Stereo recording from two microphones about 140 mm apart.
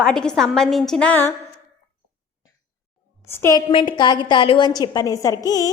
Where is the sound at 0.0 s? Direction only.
5° left (ahead or behind).